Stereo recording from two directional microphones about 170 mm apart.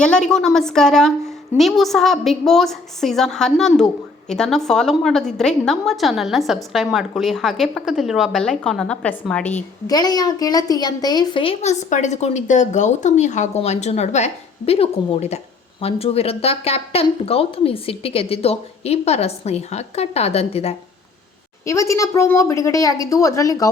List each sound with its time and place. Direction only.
0.0 s a woman's voice: 5° left (ahead or behind)
9.8 s speech: 20° left (ahead or behind)
21.6 s a woman's voice: 20° left (ahead or behind)